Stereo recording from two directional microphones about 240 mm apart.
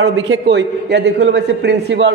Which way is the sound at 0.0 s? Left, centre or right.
Right.